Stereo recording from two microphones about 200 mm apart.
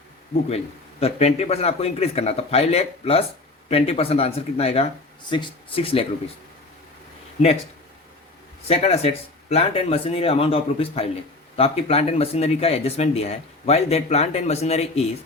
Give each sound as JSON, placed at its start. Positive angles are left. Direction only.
{"t": 0.4, "sound": "speech", "side_deg": 30}
{"t": 7.4, "sound": "speech", "side_deg": 40}
{"t": 8.6, "sound": "speech", "side_deg": 30}